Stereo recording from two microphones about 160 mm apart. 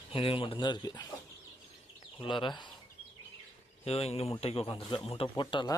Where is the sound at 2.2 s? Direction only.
30° left (ahead or behind).